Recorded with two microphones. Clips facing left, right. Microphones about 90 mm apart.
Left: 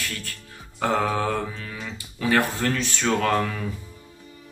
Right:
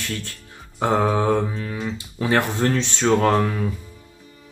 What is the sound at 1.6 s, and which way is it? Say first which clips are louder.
Speech: right 7 dB; 30° right (ahead or behind).